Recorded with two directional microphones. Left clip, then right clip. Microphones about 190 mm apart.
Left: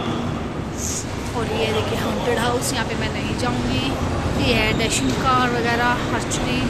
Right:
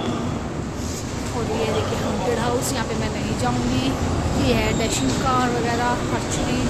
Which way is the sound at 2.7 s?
20° right (ahead or behind).